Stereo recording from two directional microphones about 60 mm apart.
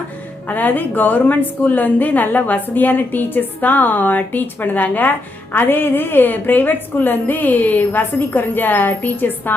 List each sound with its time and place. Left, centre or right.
0.4 s a woman's voice: left